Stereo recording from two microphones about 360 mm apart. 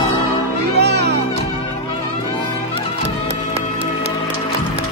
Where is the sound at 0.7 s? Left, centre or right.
Right.